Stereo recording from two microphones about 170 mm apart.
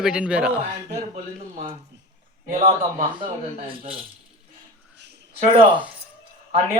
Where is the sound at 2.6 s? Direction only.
50° right (ahead or behind).